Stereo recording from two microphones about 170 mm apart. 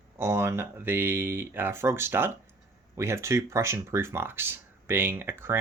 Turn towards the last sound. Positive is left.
turn(degrees=-15)  # may be behind; listen again after turning